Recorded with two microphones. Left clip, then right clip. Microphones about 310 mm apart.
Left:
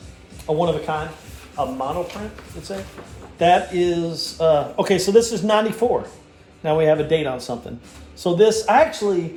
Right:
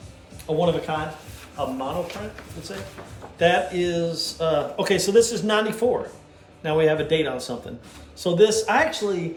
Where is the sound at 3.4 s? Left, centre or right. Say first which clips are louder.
Left 4 dB; centre.